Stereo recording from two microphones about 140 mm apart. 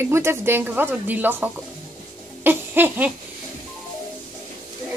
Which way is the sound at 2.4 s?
15° right (ahead or behind).